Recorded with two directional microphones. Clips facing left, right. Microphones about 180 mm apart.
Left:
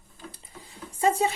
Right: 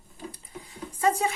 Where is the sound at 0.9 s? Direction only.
25° left (ahead or behind).